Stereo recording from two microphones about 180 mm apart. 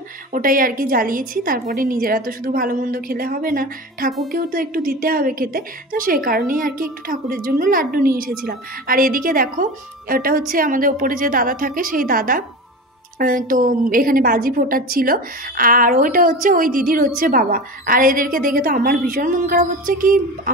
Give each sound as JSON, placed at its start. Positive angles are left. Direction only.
{"t": 0.3, "sound": "a woman's voice", "side_deg": -50}